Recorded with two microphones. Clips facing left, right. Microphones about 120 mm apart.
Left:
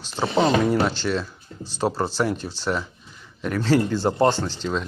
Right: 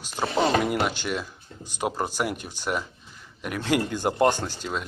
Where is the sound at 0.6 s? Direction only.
15° right (ahead or behind).